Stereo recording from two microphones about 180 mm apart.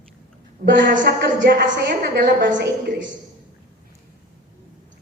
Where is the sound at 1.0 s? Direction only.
65° right (ahead or behind); by 2.5 s 50° right (ahead or behind).